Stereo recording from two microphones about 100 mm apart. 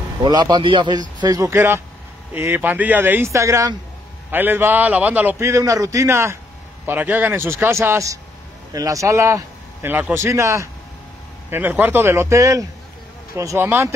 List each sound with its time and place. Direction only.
0.2 s speech: 45° right (ahead or behind)
1.2 s a man's voice: 35° right (ahead or behind)
2.3 s speech: 20° right (ahead or behind)
4.3 s a man's voice: 20° right (ahead or behind)
5.4 s a man's voice: 30° right (ahead or behind)
6.9 s speech: 20° right (ahead or behind)
10.1 s speech: 30° right (ahead or behind)
11.5 s speech: 20° right (ahead or behind); by 12.6 s 35° right (ahead or behind)
13.6 s speech: 20° right (ahead or behind)